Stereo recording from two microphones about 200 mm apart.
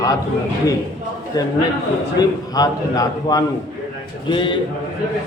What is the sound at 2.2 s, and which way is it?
A man's voice, 20° left (ahead or behind).